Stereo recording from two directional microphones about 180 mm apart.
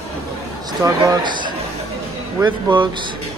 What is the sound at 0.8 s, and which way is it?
Speech, 25° right (ahead or behind).